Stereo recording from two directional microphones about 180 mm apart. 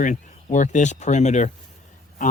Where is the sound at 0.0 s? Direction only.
45° left (ahead or behind).